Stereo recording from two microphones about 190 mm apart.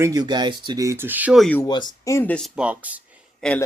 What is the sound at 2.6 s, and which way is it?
Speech, 5° right (ahead or behind).